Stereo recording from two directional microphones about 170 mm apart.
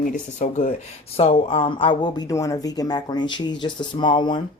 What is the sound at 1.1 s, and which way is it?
Speech, 35° left (ahead or behind).